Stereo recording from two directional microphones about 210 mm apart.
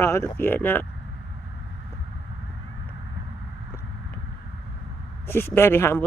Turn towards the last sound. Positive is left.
turn(degrees=10)  # may be behind; listen again after turning